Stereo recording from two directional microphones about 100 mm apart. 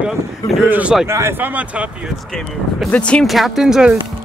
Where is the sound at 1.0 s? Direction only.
25° right (ahead or behind).